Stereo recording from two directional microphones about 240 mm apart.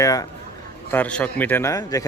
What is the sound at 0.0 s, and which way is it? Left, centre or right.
A man's voice, centre.